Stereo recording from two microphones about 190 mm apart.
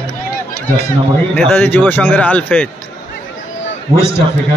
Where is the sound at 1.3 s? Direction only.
10° left (ahead or behind).